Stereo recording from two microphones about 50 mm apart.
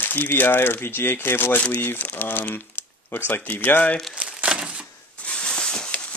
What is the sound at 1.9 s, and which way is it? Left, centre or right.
Speech, left.